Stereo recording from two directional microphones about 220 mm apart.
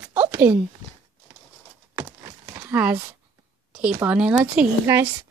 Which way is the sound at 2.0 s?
20° right (ahead or behind).